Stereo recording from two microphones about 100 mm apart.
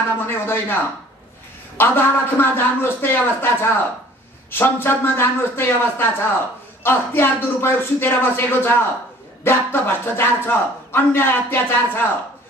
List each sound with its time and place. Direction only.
0.3 s speech: 20° left (ahead or behind)
1.8 s speech: 20° left (ahead or behind)